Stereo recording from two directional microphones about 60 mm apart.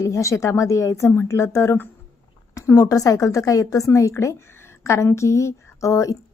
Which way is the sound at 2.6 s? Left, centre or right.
Left.